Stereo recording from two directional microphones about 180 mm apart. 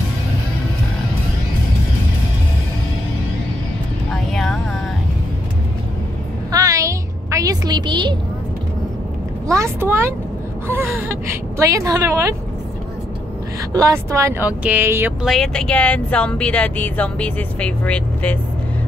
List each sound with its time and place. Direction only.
6.5 s a sound: 20° right (ahead or behind)
9.5 s a sound: 15° right (ahead or behind)
10.7 s gasp: 10° right (ahead or behind)
11.5 s speech: 15° right (ahead or behind)
13.7 s speech: 15° right (ahead or behind)
15.2 s speech: centre (ahead or behind)